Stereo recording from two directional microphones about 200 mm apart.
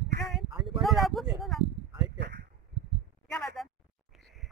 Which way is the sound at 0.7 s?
Centre (ahead or behind).